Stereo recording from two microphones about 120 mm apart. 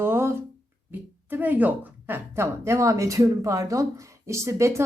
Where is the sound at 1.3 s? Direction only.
15° right (ahead or behind).